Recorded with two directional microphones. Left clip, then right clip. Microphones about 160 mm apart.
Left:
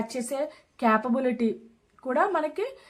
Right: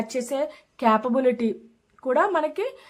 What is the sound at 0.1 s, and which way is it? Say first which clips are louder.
Speech: right 4 dB; 25° right (ahead or behind).